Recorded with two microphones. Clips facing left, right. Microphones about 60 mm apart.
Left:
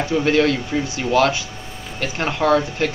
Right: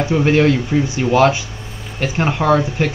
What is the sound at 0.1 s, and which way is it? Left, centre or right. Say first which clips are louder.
Speech: right 3 dB; right.